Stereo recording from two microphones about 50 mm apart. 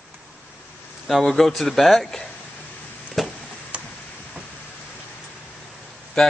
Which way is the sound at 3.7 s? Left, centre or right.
Right.